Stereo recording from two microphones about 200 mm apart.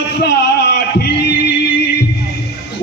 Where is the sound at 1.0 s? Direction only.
55° left (ahead or behind).